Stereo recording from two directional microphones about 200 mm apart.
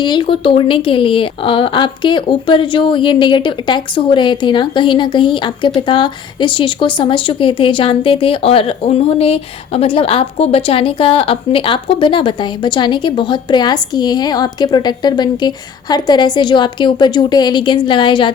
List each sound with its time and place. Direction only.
0.0 s speech: 25° left (ahead or behind)